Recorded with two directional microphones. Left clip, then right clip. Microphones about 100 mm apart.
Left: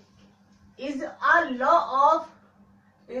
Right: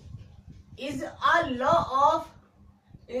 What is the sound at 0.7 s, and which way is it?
A woman's voice, 20° right (ahead or behind).